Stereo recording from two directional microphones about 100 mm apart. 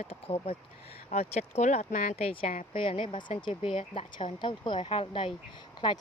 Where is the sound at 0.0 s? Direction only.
80° left.